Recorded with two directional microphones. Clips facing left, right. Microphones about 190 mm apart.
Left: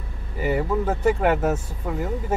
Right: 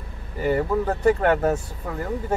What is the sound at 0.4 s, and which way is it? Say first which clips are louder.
Speech: right 1 dB; 5° left (ahead or behind).